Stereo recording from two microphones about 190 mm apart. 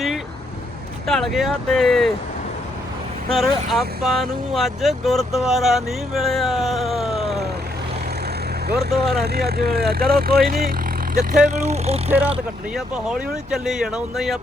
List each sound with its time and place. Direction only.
1.0 s speech: centre (ahead or behind)
3.2 s speech: centre (ahead or behind)
8.6 s speech: 55° right (ahead or behind); by 12.1 s 35° right (ahead or behind)
12.7 s speech: 5° right (ahead or behind)